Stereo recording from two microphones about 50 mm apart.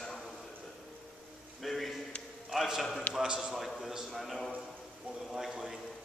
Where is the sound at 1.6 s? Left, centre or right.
Centre.